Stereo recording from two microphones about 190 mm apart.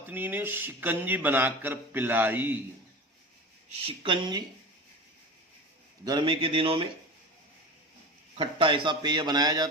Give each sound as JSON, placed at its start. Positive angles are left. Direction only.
{"t": 0.0, "sound": "speech", "side_deg": -10}
{"t": 3.8, "sound": "a man's voice", "side_deg": -25}
{"t": 6.1, "sound": "a man's voice", "side_deg": -25}
{"t": 8.4, "sound": "a man's voice", "side_deg": -25}